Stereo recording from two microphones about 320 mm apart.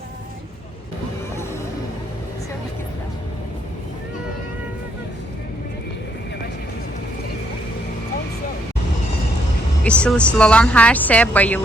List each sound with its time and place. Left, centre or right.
9.8 s a woman's voice: centre